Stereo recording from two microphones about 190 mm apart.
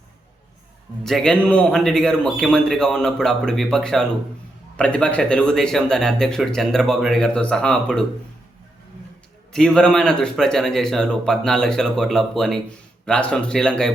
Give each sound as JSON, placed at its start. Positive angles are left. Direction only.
{"t": 1.0, "sound": "speech", "side_deg": 0}
{"t": 9.5, "sound": "speech", "side_deg": 5}